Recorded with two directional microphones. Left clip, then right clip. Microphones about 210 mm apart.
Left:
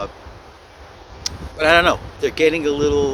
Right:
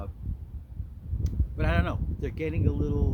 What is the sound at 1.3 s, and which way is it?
Speech, centre (ahead or behind).